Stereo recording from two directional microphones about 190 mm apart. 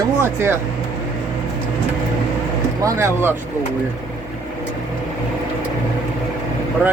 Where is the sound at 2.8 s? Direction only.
15° right (ahead or behind).